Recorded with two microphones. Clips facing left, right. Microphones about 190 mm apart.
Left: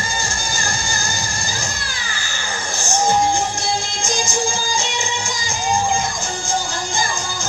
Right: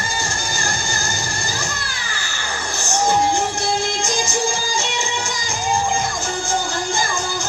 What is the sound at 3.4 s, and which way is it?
Music, 60° right (ahead or behind).